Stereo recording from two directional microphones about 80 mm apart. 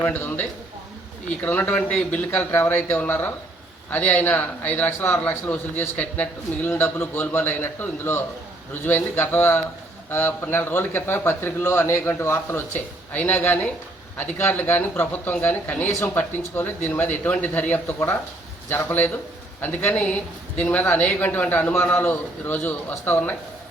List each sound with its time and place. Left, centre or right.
0.0 s speech: left